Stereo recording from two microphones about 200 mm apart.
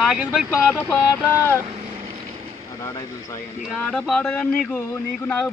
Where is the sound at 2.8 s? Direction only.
15° left (ahead or behind).